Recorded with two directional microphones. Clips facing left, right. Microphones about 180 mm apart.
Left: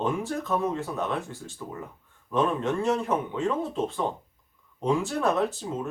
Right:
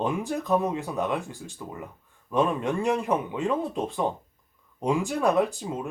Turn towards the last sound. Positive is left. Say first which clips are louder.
# right 1 dB
turn(degrees=-10)  # may be behind; listen again after turning